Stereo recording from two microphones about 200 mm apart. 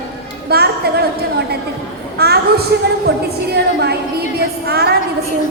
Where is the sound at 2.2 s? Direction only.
50° right (ahead or behind).